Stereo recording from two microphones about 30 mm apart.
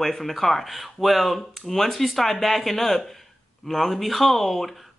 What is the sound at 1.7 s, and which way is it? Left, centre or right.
Speech, centre.